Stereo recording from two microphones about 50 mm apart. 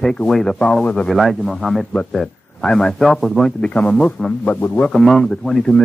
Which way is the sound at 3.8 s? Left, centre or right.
Left.